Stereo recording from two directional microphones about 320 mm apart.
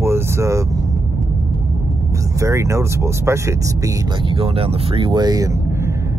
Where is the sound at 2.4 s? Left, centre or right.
Centre.